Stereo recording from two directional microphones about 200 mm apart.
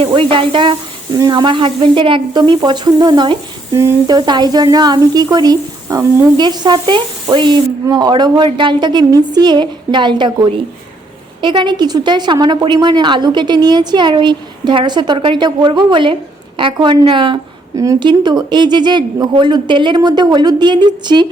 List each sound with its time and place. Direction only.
0.0 s speech: 25° right (ahead or behind)